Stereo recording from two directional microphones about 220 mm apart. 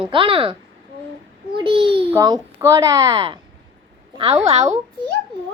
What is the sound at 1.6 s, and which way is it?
A child's voice, 25° right (ahead or behind).